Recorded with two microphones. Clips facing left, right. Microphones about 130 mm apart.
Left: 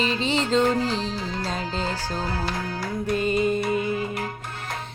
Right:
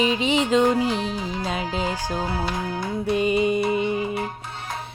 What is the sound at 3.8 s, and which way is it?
Music, 25° right (ahead or behind).